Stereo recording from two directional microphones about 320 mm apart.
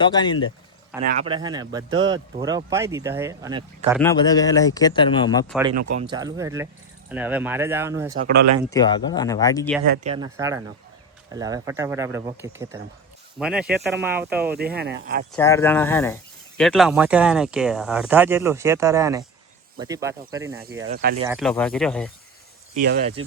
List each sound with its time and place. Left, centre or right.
0.0 s speech: centre
1.0 s speech: right
4.0 s speech: centre
5.9 s speech: centre
8.7 s speech: centre
9.9 s speech: right
10.2 s speech: centre
14.5 s speech: right
15.4 s speech: centre
20.8 s speech: right
21.2 s speech: centre
22.7 s speech: right